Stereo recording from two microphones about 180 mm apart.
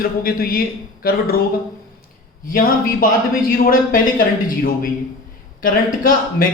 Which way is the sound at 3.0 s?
50° left (ahead or behind).